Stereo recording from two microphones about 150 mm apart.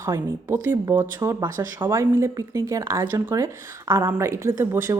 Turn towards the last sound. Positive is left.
turn(degrees=-15)  # may be behind; listen again after turning